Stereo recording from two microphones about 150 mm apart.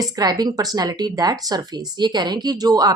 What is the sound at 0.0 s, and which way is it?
Speech, 25° right (ahead or behind).